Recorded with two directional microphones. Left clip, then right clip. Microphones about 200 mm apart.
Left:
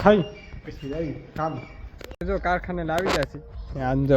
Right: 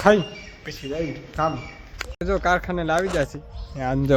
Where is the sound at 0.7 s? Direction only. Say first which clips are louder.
Right 6 dB; 45° right (ahead or behind).